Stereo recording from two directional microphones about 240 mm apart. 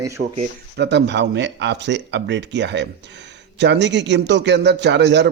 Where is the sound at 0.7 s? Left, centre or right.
Right.